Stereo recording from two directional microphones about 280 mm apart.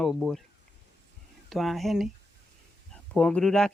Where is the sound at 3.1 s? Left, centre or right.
Centre.